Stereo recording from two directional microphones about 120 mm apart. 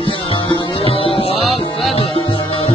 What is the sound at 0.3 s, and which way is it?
Music, 50° left (ahead or behind).